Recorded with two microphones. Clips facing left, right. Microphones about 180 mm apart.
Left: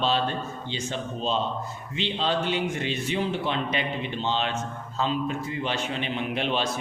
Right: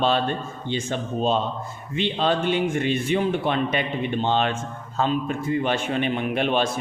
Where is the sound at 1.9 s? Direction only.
55° right (ahead or behind).